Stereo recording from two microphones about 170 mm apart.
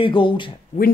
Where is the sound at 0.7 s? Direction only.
45° left (ahead or behind).